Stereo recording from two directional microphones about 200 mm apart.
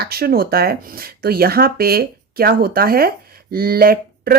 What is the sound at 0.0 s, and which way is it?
Speech, 50° right (ahead or behind).